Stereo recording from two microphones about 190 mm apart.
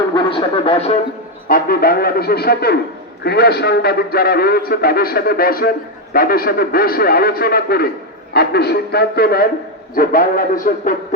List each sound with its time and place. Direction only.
0.1 s speech: 25° left (ahead or behind)
1.5 s a man's voice: 50° left (ahead or behind)